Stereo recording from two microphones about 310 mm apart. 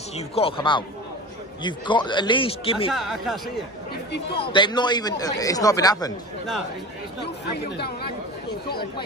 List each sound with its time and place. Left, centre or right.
0.1 s speech: centre
2.9 s speech: centre
4.4 s speech: centre